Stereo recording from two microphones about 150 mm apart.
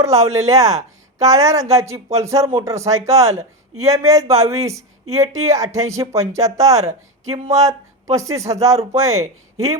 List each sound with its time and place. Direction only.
0.0 s speech: 20° right (ahead or behind)